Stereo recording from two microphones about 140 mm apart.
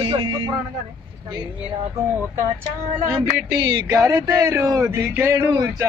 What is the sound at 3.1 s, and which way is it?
Music, 15° right (ahead or behind).